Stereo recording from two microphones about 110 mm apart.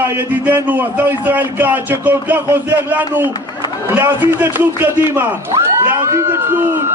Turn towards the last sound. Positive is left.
turn(degrees=-20)  # may be behind; listen again after turning